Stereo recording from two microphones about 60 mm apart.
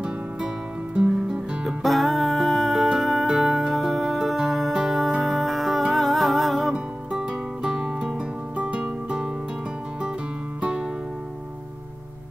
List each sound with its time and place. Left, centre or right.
1.3 s music: centre
1.8 s music: centre
6.7 s music: centre
10.6 s music: centre